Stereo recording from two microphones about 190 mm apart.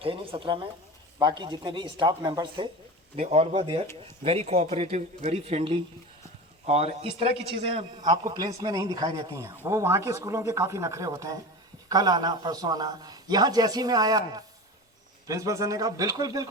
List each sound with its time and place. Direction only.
0.0 s a man's voice: 30° right (ahead or behind)
3.2 s a man's voice: 35° right (ahead or behind); by 16.5 s 15° right (ahead or behind)